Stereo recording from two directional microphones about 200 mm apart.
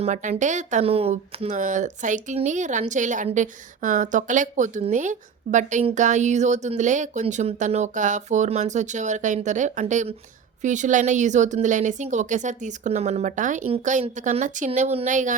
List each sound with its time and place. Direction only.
0.0 s speech: 35° right (ahead or behind)